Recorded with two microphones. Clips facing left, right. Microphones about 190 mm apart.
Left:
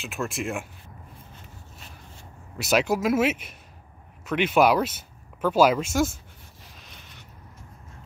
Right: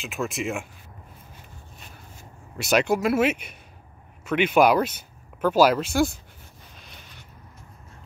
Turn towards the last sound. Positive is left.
turn(degrees=0)  # may be behind; listen again after turning